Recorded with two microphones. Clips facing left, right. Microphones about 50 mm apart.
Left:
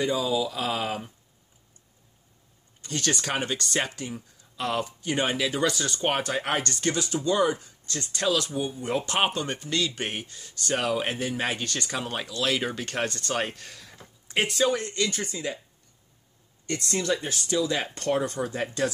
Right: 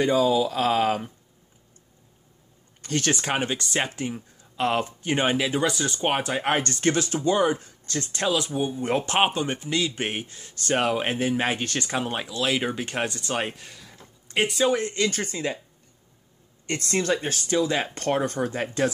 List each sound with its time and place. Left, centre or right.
0.0 s speech: right
3.1 s speech: right
6.4 s speech: right
7.2 s speech: right
7.5 s speech: right
8.3 s speech: centre
8.5 s speech: right
9.2 s speech: centre
14.7 s speech: right
15.0 s speech: right
16.6 s speech: right